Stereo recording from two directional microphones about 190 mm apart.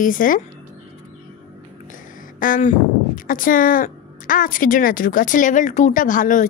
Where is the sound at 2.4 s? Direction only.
40° left (ahead or behind).